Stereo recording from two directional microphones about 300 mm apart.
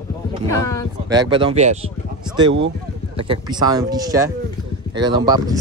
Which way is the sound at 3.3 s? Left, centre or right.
Centre.